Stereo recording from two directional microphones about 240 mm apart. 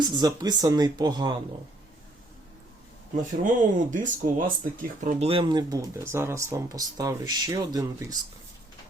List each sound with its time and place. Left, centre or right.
0.0 s speech: centre
3.4 s speech: right; by 8.0 s centre